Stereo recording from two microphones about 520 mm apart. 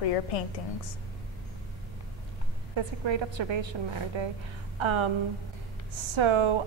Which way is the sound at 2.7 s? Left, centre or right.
Right.